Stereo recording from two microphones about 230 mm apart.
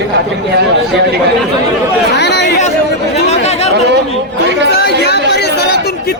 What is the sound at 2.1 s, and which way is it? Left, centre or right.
Speech, left.